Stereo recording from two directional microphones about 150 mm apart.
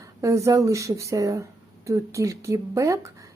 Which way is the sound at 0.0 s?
20° right (ahead or behind).